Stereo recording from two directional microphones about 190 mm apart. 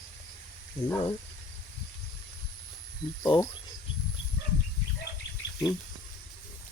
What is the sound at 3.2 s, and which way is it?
Speech, 20° left (ahead or behind).